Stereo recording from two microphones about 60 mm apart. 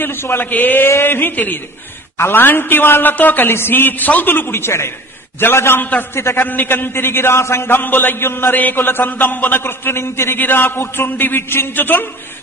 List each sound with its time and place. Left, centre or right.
0.0 s a man's voice: left